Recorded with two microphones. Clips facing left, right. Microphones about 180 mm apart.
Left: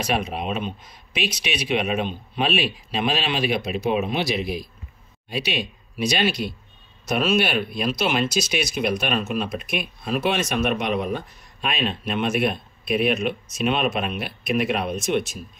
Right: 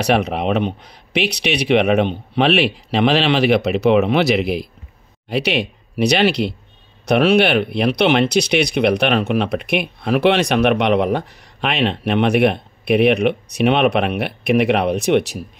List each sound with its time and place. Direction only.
0.0 s speech: 70° right (ahead or behind)